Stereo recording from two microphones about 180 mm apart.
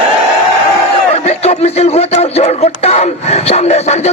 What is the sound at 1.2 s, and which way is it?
Speech, 35° left (ahead or behind).